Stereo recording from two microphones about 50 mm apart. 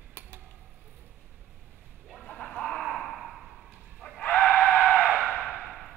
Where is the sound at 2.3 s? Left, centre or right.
Left.